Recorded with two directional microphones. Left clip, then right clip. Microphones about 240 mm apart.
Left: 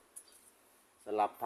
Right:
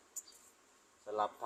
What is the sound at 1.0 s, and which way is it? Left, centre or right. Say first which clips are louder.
Speech: left 4 dB; left.